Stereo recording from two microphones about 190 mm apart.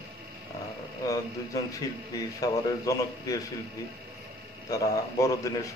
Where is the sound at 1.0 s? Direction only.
20° left (ahead or behind).